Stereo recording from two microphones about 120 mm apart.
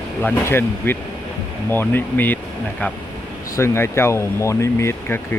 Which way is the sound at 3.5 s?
20° left (ahead or behind).